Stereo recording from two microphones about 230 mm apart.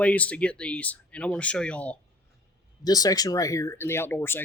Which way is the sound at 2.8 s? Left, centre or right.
Centre.